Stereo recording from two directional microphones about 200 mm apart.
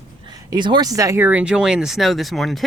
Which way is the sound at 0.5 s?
20° right (ahead or behind).